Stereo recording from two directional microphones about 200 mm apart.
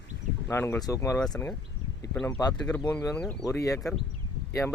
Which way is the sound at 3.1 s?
5° left (ahead or behind).